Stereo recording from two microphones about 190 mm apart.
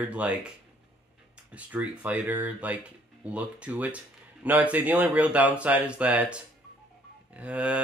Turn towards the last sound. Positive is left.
turn(degrees=-5)  # may be behind; listen again after turning